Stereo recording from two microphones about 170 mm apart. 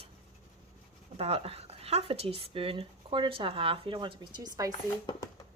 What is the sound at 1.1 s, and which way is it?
Speech, 35° right (ahead or behind).